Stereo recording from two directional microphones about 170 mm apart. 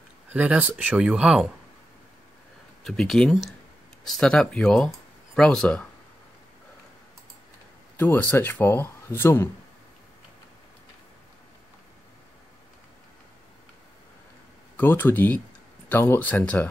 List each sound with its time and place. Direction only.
0.3 s speech: 10° right (ahead or behind)
2.8 s speech: centre (ahead or behind)
8.0 s speech: 10° left (ahead or behind)
14.8 s speech: 10° left (ahead or behind)